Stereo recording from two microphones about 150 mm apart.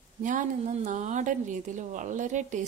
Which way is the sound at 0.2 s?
60° right (ahead or behind).